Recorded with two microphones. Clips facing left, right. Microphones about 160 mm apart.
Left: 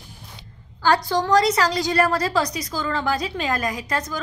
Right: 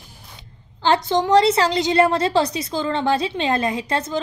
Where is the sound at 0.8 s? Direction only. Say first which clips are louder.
Right 2 dB; 25° right (ahead or behind).